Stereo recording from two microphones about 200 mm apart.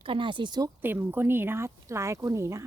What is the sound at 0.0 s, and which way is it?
Speech, 25° right (ahead or behind).